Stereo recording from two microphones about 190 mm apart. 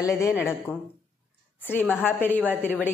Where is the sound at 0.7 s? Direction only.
10° left (ahead or behind).